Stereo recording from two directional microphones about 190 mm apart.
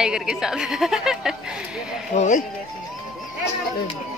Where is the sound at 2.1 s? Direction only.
40° left (ahead or behind).